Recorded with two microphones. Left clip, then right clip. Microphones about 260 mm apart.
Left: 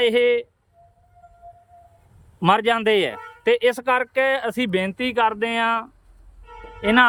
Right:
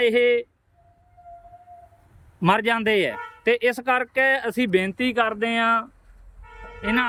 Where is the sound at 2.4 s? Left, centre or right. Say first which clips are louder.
Left 3 dB; centre.